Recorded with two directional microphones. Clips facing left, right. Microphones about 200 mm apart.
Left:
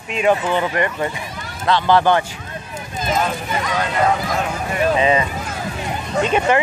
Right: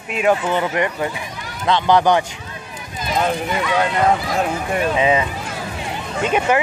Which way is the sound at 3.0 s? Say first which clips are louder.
Right 1 dB; 45° left (ahead or behind).